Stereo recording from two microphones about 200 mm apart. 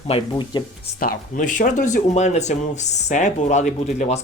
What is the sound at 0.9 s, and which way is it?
Speech, 45° left (ahead or behind).